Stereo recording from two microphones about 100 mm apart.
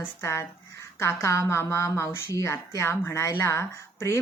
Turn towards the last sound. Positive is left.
turn(degrees=25)  # may be behind; listen again after turning